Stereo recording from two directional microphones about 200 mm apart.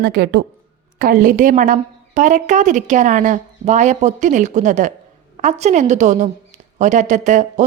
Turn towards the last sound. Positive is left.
turn(degrees=-35)  # may be behind; listen again after turning